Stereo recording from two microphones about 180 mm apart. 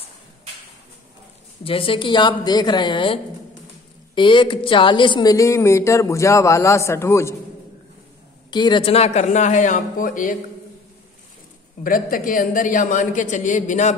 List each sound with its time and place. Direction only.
1.6 s a woman's voice: 30° left (ahead or behind); by 7.3 s 15° left (ahead or behind)
8.5 s a man's voice: 25° left (ahead or behind); by 10.3 s 50° left (ahead or behind)
11.8 s speech: 50° left (ahead or behind)